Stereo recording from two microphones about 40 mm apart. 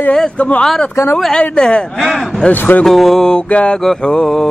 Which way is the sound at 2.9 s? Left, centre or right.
Centre.